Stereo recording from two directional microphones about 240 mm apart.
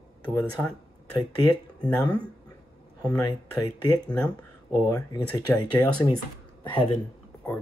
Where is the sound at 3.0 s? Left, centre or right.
Centre.